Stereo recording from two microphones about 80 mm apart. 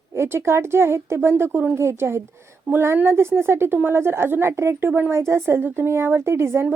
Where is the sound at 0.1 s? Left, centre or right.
Right.